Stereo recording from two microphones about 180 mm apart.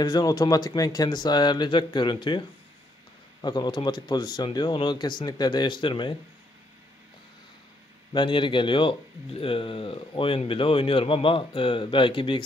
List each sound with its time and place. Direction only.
0.0 s speech: 20° left (ahead or behind)
3.4 s speech: 25° left (ahead or behind)
8.1 s speech: 25° left (ahead or behind)